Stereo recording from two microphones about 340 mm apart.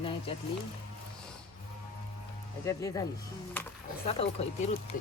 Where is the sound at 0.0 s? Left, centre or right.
Centre.